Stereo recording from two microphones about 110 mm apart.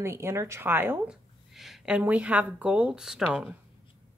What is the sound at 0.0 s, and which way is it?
A woman's voice, 25° right (ahead or behind).